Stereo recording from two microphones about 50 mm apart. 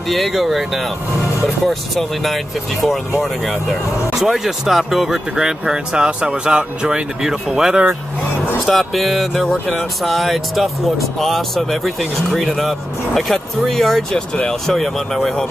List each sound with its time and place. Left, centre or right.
0.1 s speech: centre
8.6 s speech: centre
14.1 s speech: left
14.5 s speech: centre